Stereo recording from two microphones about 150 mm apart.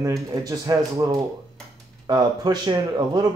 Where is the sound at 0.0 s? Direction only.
25° right (ahead or behind).